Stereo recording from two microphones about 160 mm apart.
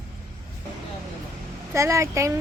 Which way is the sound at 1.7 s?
20° right (ahead or behind).